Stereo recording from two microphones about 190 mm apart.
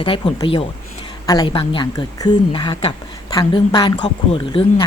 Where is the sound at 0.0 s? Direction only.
25° left (ahead or behind).